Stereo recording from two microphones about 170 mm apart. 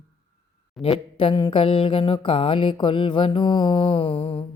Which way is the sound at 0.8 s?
35° left (ahead or behind).